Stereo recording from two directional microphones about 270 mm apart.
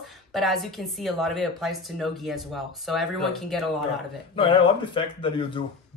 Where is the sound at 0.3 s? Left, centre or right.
Centre.